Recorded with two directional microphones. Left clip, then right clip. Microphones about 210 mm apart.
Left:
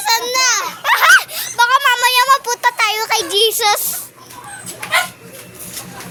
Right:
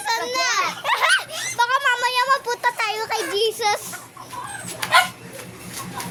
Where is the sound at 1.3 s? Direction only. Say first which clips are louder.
Left 7 dB; 15° left (ahead or behind).